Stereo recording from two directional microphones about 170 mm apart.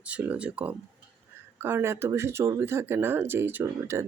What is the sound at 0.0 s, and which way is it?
Speech, 10° right (ahead or behind).